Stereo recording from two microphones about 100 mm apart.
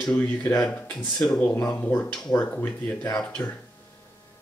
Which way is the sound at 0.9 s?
5° left (ahead or behind).